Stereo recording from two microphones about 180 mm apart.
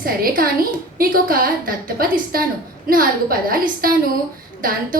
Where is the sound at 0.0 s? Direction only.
55° right (ahead or behind).